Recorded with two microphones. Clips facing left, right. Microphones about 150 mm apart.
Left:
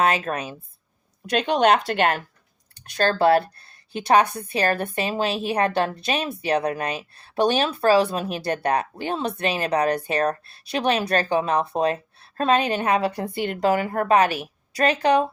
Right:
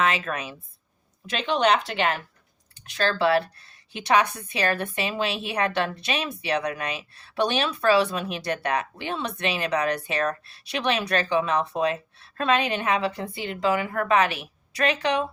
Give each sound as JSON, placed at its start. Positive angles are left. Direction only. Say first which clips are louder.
{"t": 0.0, "sound": "a woman's voice", "louder": "left 3 dB", "side_deg": 40}
{"t": 1.4, "sound": "a woman's voice", "louder": "left 3 dB", "side_deg": 50}